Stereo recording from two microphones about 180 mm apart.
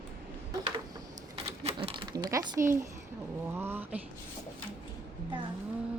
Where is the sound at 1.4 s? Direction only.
30° right (ahead or behind); by 2.8 s 15° right (ahead or behind).